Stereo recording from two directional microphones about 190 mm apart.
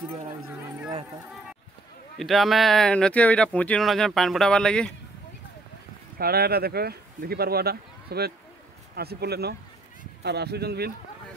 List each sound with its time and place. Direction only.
2.1 s speech: centre (ahead or behind)
6.1 s speech: 55° right (ahead or behind)